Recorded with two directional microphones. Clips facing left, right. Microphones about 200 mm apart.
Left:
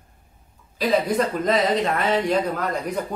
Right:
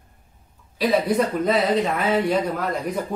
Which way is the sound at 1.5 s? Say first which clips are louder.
Even; 5° right (ahead or behind).